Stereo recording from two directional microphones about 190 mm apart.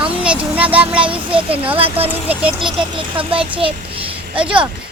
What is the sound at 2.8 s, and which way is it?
Speech, 25° right (ahead or behind).